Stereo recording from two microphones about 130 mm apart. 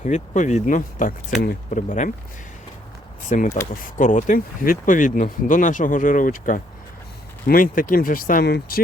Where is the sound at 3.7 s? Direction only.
90° left.